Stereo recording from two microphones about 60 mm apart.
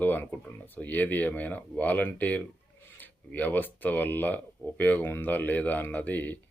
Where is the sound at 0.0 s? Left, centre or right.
Left.